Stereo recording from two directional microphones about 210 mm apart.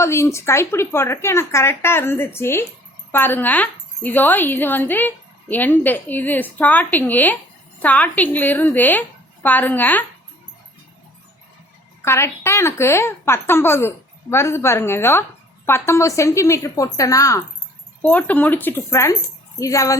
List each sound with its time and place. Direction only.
0.0 s speech: 15° left (ahead or behind)
12.0 s speech: 10° left (ahead or behind)